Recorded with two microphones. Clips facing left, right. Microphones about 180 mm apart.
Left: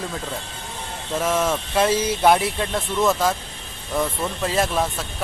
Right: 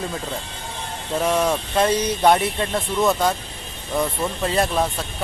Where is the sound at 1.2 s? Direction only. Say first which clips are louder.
Right 2 dB; centre (ahead or behind).